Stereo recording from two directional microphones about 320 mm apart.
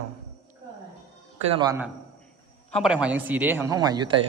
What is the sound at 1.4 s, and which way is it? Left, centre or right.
A man's voice, centre.